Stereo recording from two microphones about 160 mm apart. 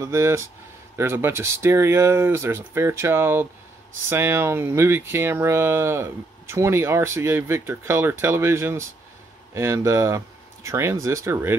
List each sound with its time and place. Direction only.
0.0 s speech: 15° right (ahead or behind)